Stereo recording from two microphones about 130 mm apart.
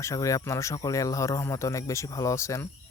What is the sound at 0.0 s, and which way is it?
Speech, 25° left (ahead or behind).